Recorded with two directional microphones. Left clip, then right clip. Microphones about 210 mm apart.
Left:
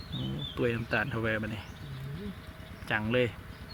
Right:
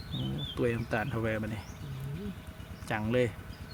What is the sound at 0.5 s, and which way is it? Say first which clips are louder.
Speech: left 1 dB; centre (ahead or behind).